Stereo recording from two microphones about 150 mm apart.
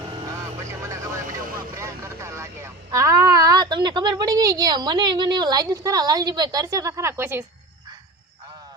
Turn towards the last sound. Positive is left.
turn(degrees=-15)  # may be behind; listen again after turning